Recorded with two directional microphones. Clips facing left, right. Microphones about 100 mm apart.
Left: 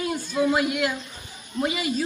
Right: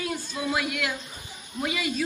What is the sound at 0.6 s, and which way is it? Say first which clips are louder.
Speech: left 5 dB; 10° left (ahead or behind).